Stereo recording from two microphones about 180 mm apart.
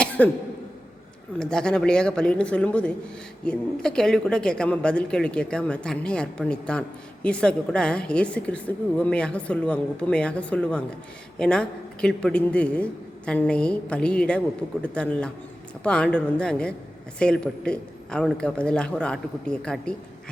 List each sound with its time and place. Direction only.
0.0 s cough: 10° left (ahead or behind)
1.4 s speech: 5° left (ahead or behind)